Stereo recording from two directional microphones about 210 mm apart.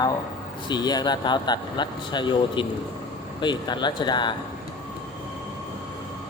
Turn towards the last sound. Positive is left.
turn(degrees=20)  # may be behind; listen again after turning